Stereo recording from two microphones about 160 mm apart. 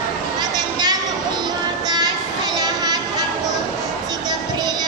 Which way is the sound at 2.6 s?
25° right (ahead or behind).